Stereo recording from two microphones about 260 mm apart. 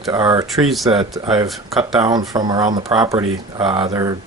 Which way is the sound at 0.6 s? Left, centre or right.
Centre.